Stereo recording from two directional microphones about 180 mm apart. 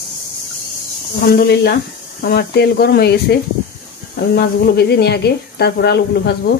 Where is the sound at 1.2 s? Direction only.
60° left (ahead or behind).